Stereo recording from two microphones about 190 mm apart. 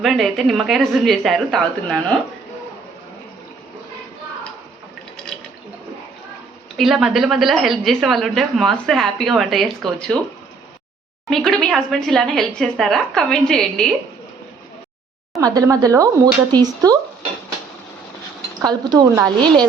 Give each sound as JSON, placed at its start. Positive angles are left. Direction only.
{"t": 0.0, "sound": "speech", "side_deg": 0}
{"t": 6.7, "sound": "speech", "side_deg": 0}
{"t": 11.3, "sound": "speech", "side_deg": 0}
{"t": 15.4, "sound": "speech", "side_deg": -20}
{"t": 18.6, "sound": "speech", "side_deg": -20}